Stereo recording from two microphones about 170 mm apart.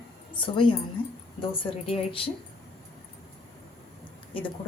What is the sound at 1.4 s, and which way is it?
Speech, 35° left (ahead or behind).